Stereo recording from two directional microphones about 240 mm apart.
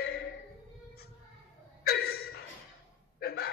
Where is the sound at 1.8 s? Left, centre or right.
Left.